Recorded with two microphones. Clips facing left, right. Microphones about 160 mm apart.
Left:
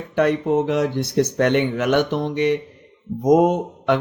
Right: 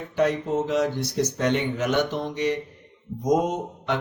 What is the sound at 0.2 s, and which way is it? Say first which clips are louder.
Speech: left 5 dB; 60° left (ahead or behind).